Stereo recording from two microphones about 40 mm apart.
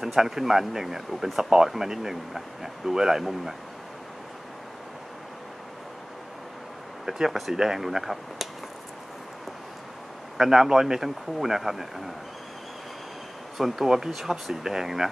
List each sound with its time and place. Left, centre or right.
0.0 s speech: centre
7.1 s speech: centre
10.3 s speech: centre
13.6 s speech: centre